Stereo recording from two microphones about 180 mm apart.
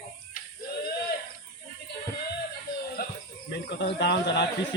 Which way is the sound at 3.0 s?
55° left (ahead or behind).